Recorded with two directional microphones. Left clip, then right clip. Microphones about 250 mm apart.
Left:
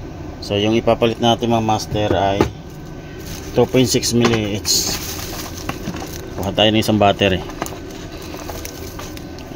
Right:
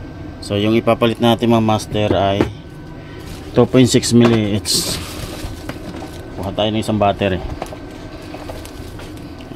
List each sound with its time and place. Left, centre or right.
0.5 s speech: right
3.5 s speech: right
6.4 s speech: centre